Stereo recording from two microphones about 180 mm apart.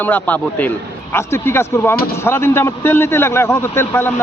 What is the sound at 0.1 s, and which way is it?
A man's voice, 10° left (ahead or behind).